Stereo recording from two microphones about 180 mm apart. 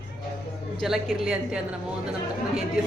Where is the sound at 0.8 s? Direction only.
5° right (ahead or behind).